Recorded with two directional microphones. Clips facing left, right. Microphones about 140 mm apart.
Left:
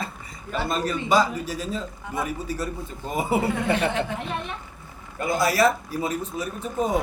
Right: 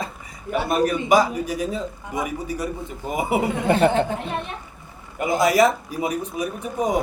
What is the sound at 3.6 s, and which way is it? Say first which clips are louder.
Speech: right 6 dB; 35° right (ahead or behind).